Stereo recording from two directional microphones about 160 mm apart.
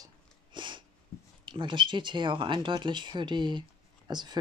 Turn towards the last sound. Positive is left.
turn(degrees=-25)  # may be behind; listen again after turning